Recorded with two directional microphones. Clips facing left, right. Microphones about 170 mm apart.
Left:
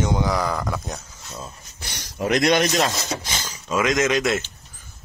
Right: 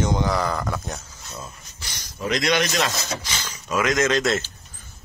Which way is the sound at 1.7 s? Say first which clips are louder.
Left 8 dB; 60° left (ahead or behind).